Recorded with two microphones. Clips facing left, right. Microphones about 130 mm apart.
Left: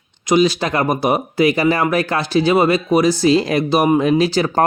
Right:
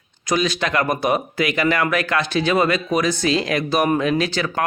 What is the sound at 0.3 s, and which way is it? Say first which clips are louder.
Speech: left 6 dB; 30° left (ahead or behind).